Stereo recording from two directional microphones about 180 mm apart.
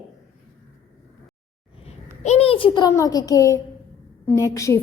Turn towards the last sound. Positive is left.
turn(degrees=15)  # may be behind; listen again after turning